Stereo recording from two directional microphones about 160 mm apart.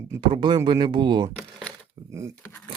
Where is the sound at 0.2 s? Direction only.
30° right (ahead or behind).